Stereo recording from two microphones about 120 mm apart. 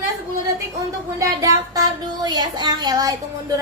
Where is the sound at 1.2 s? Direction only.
30° right (ahead or behind).